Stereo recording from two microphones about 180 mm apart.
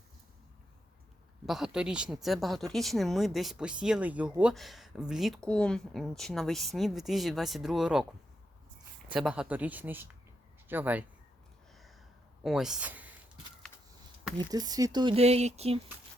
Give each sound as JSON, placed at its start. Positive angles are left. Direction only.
{"t": 1.5, "sound": "speech", "side_deg": 0}
{"t": 9.0, "sound": "speech", "side_deg": -5}
{"t": 11.7, "sound": "a sound", "side_deg": 0}
{"t": 12.4, "sound": "speech", "side_deg": 0}
{"t": 14.3, "sound": "speech", "side_deg": -20}